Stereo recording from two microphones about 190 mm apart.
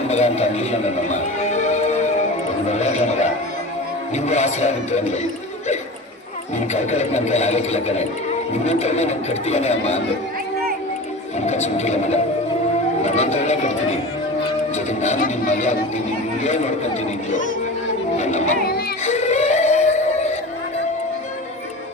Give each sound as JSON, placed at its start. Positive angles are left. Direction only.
{"t": 0.1, "sound": "music", "side_deg": 35}
{"t": 2.6, "sound": "a sound", "side_deg": 35}
{"t": 4.1, "sound": "speech", "side_deg": 35}
{"t": 6.7, "sound": "speech", "side_deg": 35}
{"t": 11.3, "sound": "speech", "side_deg": 35}
{"t": 14.8, "sound": "speech", "side_deg": 35}
{"t": 18.2, "sound": "music", "side_deg": 35}
{"t": 19.0, "sound": "synthetic singing", "side_deg": 35}